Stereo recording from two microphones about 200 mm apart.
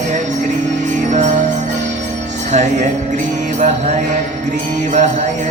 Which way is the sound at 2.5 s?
35° right (ahead or behind).